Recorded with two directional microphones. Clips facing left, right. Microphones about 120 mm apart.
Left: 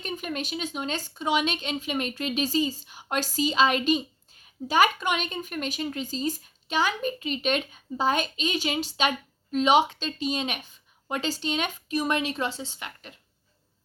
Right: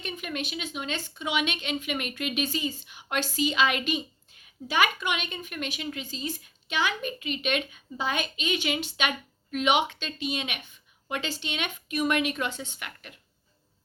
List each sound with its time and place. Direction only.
0.0 s speech: 40° left (ahead or behind)